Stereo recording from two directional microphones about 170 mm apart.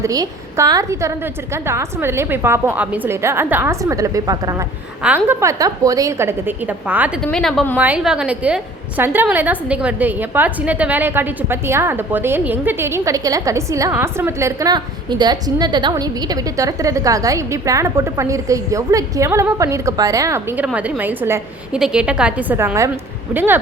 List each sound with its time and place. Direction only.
0.0 s a woman's voice: 20° right (ahead or behind)
7.3 s a woman's voice: 5° left (ahead or behind)
7.8 s a woman's voice: 5° right (ahead or behind)
20.7 s a woman's voice: 5° right (ahead or behind)